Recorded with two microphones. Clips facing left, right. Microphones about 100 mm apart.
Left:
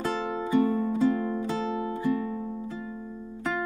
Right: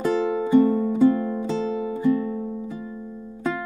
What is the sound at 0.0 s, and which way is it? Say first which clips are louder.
Music: right 7 dB; 20° right (ahead or behind).